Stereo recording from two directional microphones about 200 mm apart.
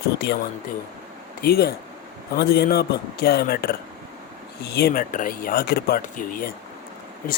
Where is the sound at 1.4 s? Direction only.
50° left (ahead or behind).